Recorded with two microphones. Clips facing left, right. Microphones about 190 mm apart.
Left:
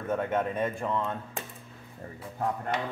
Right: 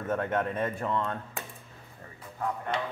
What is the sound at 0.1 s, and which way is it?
Speech, 5° left (ahead or behind).